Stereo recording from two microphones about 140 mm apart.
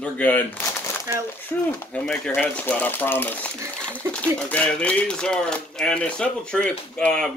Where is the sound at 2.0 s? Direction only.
5° left (ahead or behind).